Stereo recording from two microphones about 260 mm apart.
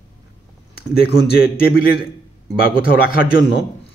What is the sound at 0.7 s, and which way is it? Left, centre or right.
Speech, left.